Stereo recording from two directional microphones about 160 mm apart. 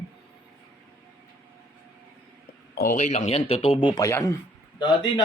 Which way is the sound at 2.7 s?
60° left (ahead or behind).